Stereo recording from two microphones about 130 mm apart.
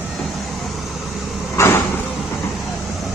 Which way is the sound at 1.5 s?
20° left (ahead or behind).